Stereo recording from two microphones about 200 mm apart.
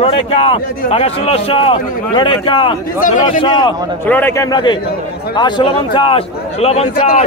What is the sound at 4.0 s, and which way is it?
A man's voice, 10° left (ahead or behind).